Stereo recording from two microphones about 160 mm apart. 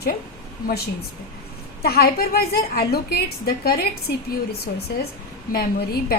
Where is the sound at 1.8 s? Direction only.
75° left (ahead or behind).